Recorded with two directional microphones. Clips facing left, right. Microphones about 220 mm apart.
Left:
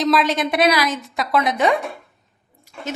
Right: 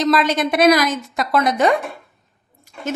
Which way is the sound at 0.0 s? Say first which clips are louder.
Right 1 dB; centre (ahead or behind).